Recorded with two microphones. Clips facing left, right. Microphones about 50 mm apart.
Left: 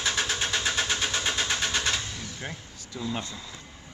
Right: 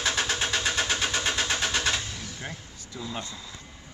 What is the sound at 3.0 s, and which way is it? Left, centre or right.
Speech, centre.